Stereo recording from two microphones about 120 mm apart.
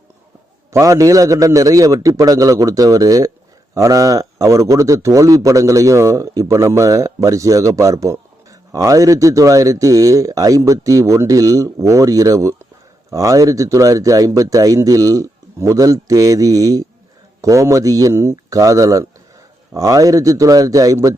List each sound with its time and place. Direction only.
0.7 s a man's voice: 25° right (ahead or behind)